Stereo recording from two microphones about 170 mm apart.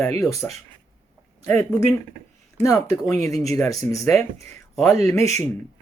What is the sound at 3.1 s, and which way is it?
Speech, 20° left (ahead or behind).